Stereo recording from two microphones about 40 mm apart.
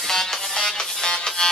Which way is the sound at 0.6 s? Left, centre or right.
Centre.